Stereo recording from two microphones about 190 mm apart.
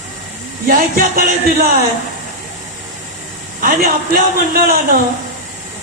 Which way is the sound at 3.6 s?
45° right (ahead or behind).